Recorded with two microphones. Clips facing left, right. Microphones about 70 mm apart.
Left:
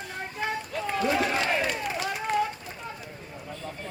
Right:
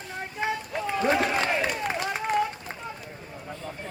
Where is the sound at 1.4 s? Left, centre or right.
Centre.